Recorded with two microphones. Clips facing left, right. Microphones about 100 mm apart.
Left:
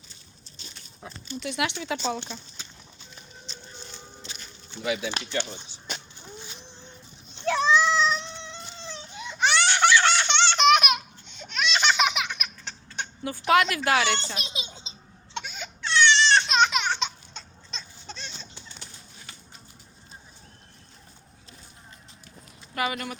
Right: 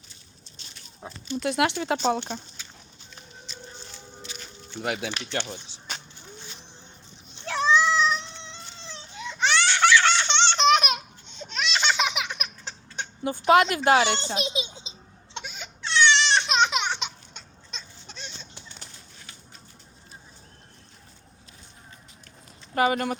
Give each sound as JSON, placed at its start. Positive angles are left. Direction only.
{"t": 1.0, "sound": "speech", "side_deg": -30}
{"t": 1.4, "sound": "speech", "side_deg": -45}
{"t": 4.8, "sound": "speech", "side_deg": -60}
{"t": 5.3, "sound": "speech", "side_deg": -70}
{"t": 7.7, "sound": "child singing", "side_deg": 20}
{"t": 8.0, "sound": "cat", "side_deg": 15}
{"t": 8.9, "sound": "baby cry", "side_deg": 15}
{"t": 10.1, "sound": "baby laughter", "side_deg": -25}
{"t": 15.8, "sound": "baby cry", "side_deg": -25}
{"t": 16.4, "sound": "laughter", "side_deg": -20}
{"t": 22.7, "sound": "speech", "side_deg": -35}